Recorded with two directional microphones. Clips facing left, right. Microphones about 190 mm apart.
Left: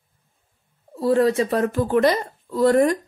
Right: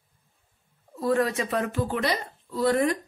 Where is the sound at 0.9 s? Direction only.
30° left (ahead or behind).